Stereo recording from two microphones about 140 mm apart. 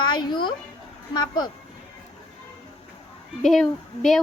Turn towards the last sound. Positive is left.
turn(degrees=0)  # may be behind; listen again after turning